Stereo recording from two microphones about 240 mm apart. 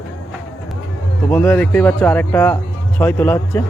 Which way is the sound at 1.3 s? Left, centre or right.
Centre.